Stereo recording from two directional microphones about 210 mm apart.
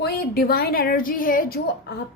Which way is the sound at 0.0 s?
45° left (ahead or behind).